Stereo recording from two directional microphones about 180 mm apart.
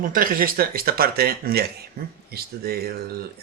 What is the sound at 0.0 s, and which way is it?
Speech, 50° right (ahead or behind).